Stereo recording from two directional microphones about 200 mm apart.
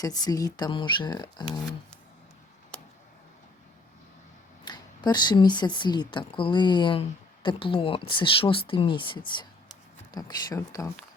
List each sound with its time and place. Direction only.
0.0 s speech: 20° left (ahead or behind)
4.6 s speech: 20° left (ahead or behind)